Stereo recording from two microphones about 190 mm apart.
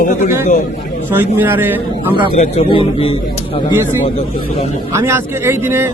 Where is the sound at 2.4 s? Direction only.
30° left (ahead or behind).